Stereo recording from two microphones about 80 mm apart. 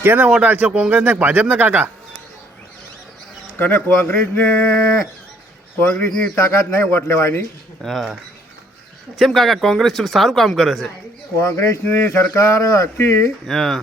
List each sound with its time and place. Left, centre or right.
0.0 s speech: right
3.6 s speech: left
5.8 s a man's voice: left
6.4 s a man's voice: left
7.8 s speech: centre
11.3 s a man's voice: left
13.5 s speech: centre